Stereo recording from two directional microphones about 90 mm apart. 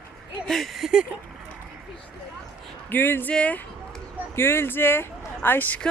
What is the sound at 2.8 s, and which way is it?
Speech, 25° left (ahead or behind).